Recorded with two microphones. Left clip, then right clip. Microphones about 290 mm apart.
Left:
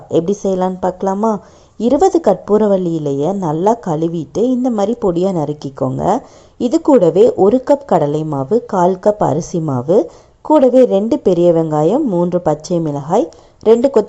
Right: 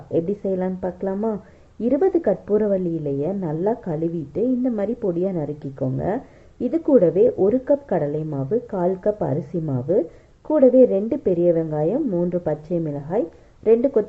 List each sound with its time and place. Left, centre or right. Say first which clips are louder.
0.1 s a woman's voice: left 8 dB; left